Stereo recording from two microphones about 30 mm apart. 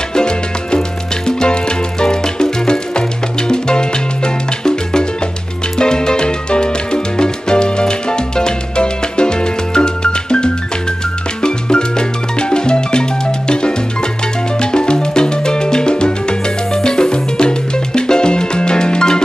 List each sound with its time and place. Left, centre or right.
0.1 s music: left